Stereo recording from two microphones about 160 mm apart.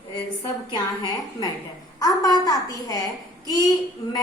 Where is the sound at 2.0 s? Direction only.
25° left (ahead or behind).